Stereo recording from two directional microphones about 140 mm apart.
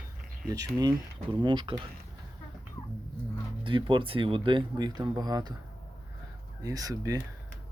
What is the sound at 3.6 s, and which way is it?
Speech, 35° right (ahead or behind).